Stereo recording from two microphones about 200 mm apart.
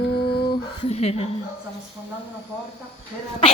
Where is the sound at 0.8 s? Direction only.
30° left (ahead or behind).